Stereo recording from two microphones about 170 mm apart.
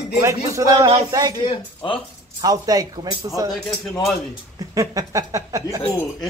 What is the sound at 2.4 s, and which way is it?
Speech, 20° right (ahead or behind).